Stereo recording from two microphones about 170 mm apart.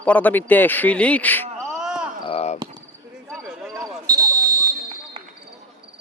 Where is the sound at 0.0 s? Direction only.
10° left (ahead or behind).